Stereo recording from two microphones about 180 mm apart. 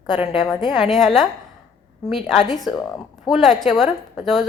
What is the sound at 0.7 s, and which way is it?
A woman's voice, centre (ahead or behind).